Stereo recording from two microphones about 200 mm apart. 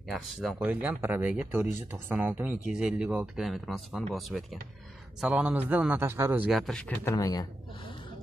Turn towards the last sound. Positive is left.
turn(degrees=15)  # may be behind; listen again after turning